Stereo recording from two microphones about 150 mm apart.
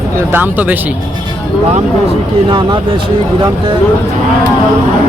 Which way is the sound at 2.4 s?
30° right (ahead or behind).